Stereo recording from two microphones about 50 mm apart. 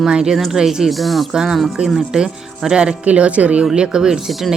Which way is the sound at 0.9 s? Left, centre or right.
Centre.